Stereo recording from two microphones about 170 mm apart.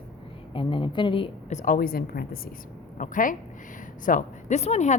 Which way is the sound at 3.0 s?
50° left (ahead or behind).